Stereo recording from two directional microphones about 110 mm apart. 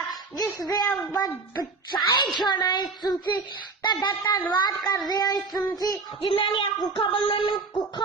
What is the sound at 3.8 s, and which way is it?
Female singing, 45° left (ahead or behind).